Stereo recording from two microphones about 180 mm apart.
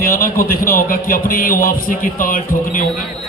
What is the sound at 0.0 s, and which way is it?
Speech, 50° left (ahead or behind).